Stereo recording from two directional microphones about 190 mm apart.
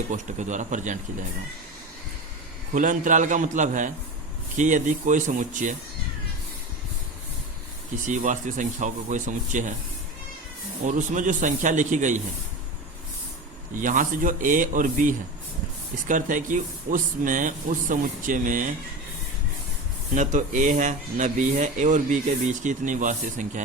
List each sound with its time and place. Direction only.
0.1 s speech: 40° right (ahead or behind)
2.7 s speech: 45° right (ahead or behind)
8.0 s speech: 40° right (ahead or behind)
10.8 s speech: 40° right (ahead or behind)
13.7 s speech: 45° right (ahead or behind)
20.1 s speech: 40° right (ahead or behind)